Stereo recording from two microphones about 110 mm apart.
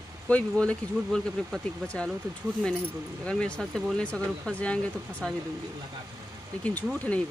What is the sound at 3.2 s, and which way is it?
Speech, 10° left (ahead or behind).